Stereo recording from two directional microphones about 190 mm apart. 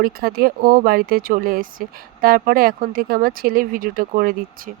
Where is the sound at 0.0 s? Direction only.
55° right (ahead or behind).